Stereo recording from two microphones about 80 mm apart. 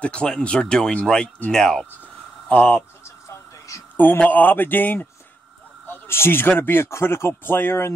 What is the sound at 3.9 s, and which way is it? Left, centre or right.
Speech, left.